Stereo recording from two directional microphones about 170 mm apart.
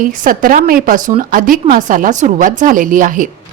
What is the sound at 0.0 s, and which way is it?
A woman's voice, 55° right (ahead or behind).